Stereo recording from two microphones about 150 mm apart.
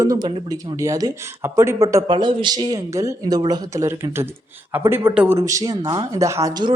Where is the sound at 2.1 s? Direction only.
30° right (ahead or behind); by 5.3 s 10° right (ahead or behind).